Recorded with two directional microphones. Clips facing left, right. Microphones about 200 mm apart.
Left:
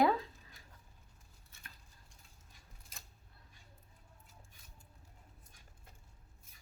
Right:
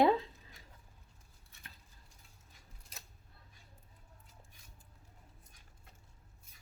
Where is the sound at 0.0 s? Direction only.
25° right (ahead or behind).